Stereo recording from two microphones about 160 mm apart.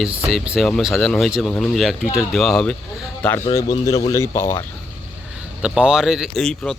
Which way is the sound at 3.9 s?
20° left (ahead or behind).